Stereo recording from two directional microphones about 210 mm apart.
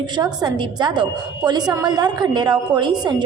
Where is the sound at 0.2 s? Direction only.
20° right (ahead or behind).